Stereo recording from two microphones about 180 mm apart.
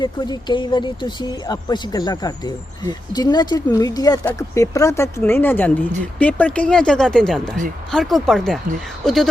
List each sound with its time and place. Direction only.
0.0 s speech: 25° left (ahead or behind); by 9.3 s centre (ahead or behind)